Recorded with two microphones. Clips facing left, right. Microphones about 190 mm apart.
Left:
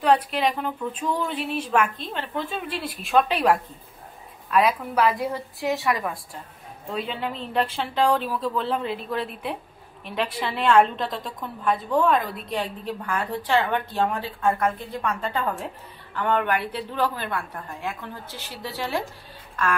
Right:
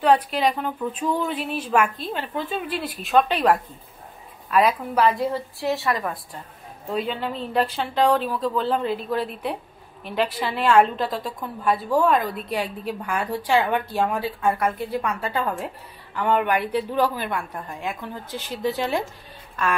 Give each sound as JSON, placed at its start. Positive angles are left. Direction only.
{"t": 0.0, "sound": "speech", "side_deg": 0}
{"t": 5.2, "sound": "a woman's voice", "side_deg": 15}
{"t": 6.9, "sound": "a woman's voice", "side_deg": -5}